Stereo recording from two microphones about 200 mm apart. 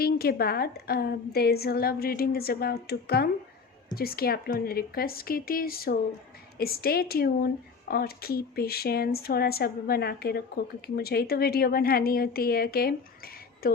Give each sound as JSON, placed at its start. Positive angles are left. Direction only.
{"t": 0.0, "sound": "speech", "side_deg": 50}